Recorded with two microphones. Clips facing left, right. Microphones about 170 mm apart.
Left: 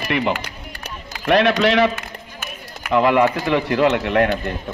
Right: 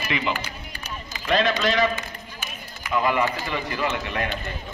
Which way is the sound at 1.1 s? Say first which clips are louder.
Left 6 dB; 70° left (ahead or behind).